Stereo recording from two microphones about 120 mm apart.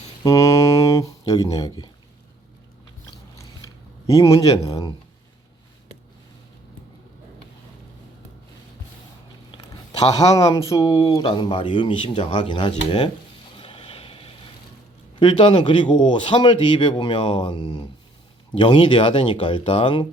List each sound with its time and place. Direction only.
0.2 s a sound: 30° left (ahead or behind)
3.1 s biting: 30° left (ahead or behind)
4.6 s speech: 30° left (ahead or behind)
9.5 s speech: 35° left (ahead or behind)
13.6 s vehicle: 50° left (ahead or behind)
15.2 s speech: 45° left (ahead or behind)